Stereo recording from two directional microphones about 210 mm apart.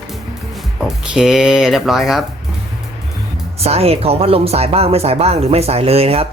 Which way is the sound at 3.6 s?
30° right (ahead or behind).